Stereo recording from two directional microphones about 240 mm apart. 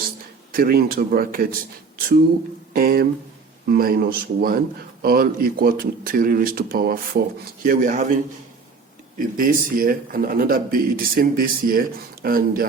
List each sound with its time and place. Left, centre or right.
0.5 s a man's voice: right
2.7 s a man's voice: right